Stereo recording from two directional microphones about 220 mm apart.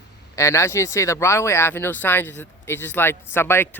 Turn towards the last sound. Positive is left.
turn(degrees=10)  # may be behind; listen again after turning